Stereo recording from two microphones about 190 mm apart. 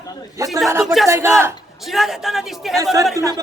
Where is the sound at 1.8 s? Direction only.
Centre (ahead or behind).